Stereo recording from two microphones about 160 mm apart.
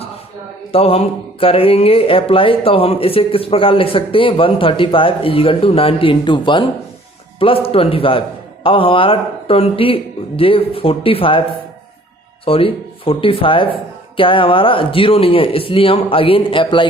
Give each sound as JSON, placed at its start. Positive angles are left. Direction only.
{"t": 0.7, "sound": "speech", "side_deg": 35}
{"t": 12.5, "sound": "speech", "side_deg": 35}